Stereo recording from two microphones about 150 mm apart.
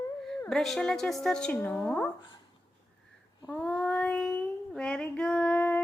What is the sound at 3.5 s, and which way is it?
Child singing, 10° left (ahead or behind).